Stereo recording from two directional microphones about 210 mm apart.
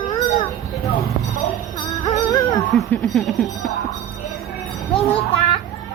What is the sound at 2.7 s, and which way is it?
Speech, centre (ahead or behind).